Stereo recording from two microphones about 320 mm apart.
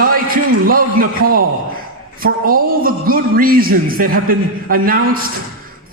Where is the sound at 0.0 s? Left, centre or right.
Right.